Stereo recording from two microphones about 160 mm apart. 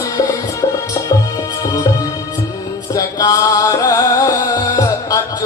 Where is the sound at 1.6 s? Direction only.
20° left (ahead or behind).